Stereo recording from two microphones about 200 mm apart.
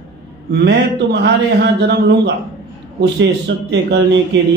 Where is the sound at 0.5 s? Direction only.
55° right (ahead or behind).